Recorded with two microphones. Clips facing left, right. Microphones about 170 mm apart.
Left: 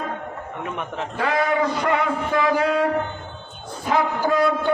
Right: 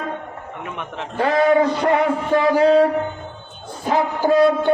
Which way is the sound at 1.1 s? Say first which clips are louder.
Right 6 dB; 40° right (ahead or behind).